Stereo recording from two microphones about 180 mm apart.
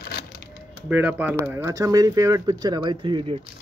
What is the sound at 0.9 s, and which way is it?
Speech, 10° right (ahead or behind).